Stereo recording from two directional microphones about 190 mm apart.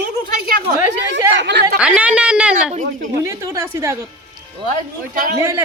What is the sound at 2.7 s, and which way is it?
Speech, 40° right (ahead or behind).